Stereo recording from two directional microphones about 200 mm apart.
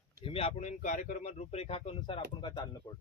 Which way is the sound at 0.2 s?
25° left (ahead or behind).